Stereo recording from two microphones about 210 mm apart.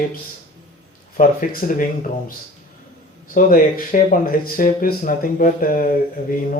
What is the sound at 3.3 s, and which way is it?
A man's voice, 40° left (ahead or behind).